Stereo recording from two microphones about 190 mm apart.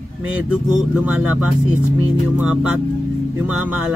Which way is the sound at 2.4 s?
5° right (ahead or behind).